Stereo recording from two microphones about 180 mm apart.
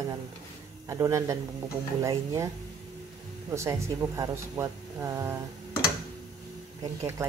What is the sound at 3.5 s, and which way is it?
Speech, 15° right (ahead or behind).